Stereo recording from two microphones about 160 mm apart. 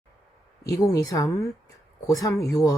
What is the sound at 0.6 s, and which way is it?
Speech, 20° left (ahead or behind).